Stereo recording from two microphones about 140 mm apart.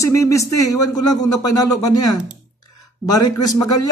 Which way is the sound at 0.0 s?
20° left (ahead or behind).